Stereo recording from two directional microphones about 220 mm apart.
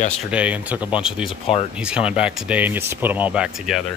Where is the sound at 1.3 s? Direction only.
25° left (ahead or behind).